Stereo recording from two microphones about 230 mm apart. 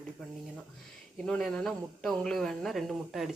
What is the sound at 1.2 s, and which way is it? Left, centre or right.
Speech, centre.